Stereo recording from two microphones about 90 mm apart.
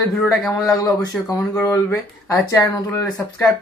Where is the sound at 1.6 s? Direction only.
35° left (ahead or behind).